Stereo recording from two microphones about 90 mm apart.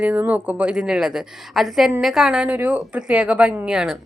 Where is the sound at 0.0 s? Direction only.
20° right (ahead or behind).